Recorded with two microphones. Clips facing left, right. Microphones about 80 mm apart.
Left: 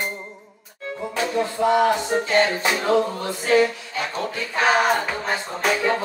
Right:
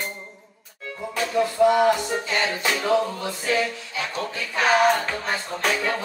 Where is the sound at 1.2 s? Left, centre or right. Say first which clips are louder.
Right 3 dB; left.